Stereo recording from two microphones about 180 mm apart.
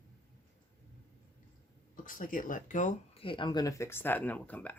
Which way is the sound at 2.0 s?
50° left (ahead or behind).